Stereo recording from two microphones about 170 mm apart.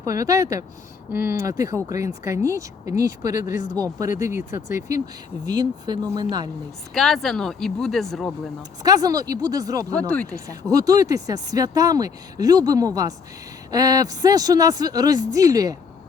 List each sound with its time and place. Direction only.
0.0 s speech: 20° right (ahead or behind)
6.9 s speech: centre (ahead or behind)
8.8 s speech: 20° right (ahead or behind)
9.9 s speech: 10° left (ahead or behind)
10.3 s speech: 20° right (ahead or behind)